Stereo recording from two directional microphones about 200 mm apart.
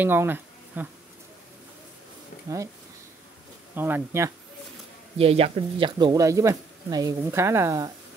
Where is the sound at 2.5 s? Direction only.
15° right (ahead or behind).